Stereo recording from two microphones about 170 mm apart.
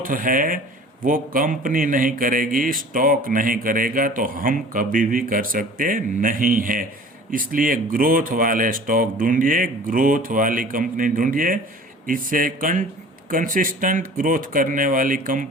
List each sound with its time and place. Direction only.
0.0 s speech: 55° right (ahead or behind)